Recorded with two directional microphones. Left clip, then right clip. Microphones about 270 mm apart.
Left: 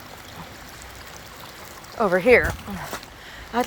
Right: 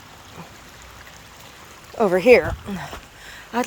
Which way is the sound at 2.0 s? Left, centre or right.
Right.